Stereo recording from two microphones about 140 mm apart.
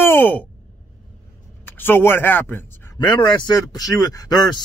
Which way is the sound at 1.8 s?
15° left (ahead or behind).